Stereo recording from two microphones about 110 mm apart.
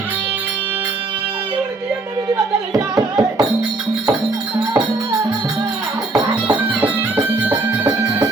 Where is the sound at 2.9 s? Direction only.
30° right (ahead or behind).